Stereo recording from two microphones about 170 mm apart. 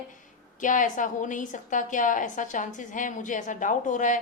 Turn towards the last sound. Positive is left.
turn(degrees=50)  # may be behind; listen again after turning